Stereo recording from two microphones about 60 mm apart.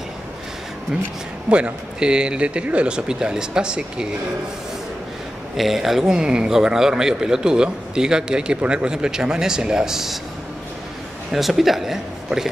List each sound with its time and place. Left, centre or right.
1.5 s a man's voice: centre
5.6 s a man's voice: centre
11.3 s speech: centre